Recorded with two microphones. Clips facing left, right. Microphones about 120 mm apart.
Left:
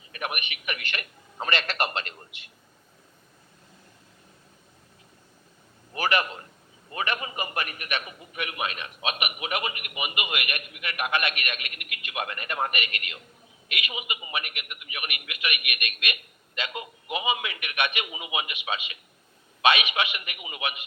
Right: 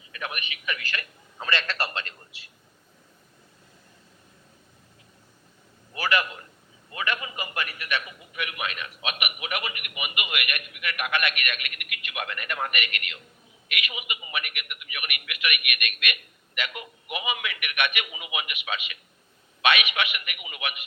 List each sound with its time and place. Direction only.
0.9 s a man's voice: 35° left (ahead or behind)
5.9 s a man's voice: 35° left (ahead or behind)